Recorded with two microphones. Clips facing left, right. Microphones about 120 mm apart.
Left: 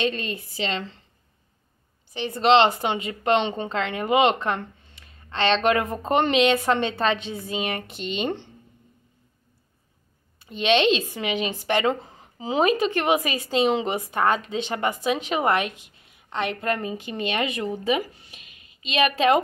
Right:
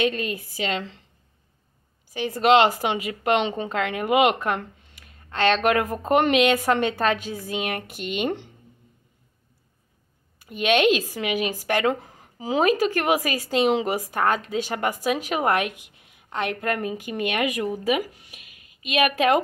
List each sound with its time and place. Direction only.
0.0 s speech: 10° right (ahead or behind)
2.1 s speech: 10° right (ahead or behind)
10.4 s speech: 10° right (ahead or behind)